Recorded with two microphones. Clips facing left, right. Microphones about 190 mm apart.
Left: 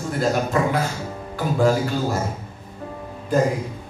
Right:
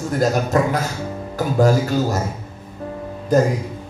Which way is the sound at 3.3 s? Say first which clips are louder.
Right 4 dB; 40° right (ahead or behind).